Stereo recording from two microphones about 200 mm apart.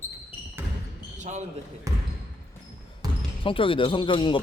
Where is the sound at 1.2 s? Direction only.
35° right (ahead or behind).